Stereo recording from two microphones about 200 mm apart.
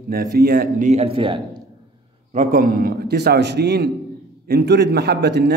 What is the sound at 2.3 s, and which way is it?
A man's voice, 40° right (ahead or behind).